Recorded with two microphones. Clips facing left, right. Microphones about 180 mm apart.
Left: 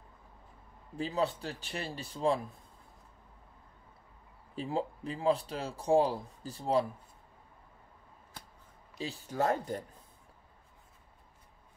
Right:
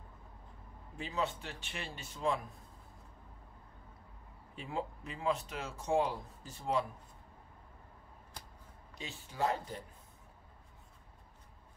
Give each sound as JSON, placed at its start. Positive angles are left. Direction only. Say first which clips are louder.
{"t": 0.9, "sound": "speech", "louder": "left 5 dB", "side_deg": 35}
{"t": 4.6, "sound": "speech", "louder": "left 5 dB", "side_deg": 35}
{"t": 8.9, "sound": "speech", "louder": "left 9 dB", "side_deg": 35}